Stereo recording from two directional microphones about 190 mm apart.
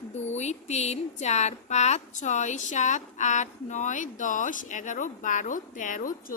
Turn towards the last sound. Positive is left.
turn(degrees=45)  # may be behind; listen again after turning